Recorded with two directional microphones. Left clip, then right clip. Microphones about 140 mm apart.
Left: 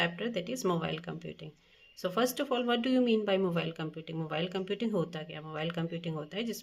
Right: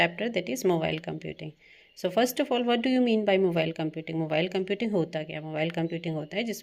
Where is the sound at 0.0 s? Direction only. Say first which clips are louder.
Right 6 dB; 40° right (ahead or behind).